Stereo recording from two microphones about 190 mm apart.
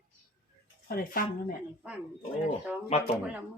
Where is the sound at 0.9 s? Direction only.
50° left (ahead or behind).